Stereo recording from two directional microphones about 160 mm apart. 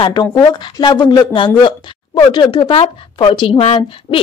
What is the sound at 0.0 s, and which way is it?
Speech, 25° left (ahead or behind).